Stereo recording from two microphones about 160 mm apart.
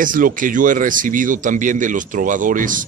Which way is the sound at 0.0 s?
60° right (ahead or behind).